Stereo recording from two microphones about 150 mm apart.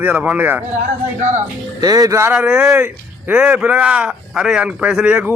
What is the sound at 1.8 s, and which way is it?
Speech, 25° right (ahead or behind).